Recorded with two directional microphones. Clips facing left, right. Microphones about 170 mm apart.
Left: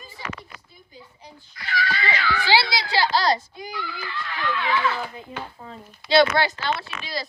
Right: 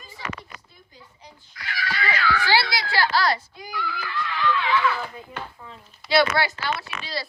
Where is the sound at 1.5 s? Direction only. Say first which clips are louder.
Left 3 dB; 25° left (ahead or behind).